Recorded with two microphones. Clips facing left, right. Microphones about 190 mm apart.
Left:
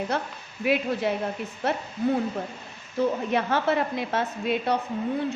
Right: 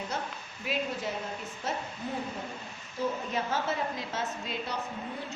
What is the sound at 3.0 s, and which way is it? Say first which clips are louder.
A woman's voice: left 7 dB; 60° left (ahead or behind).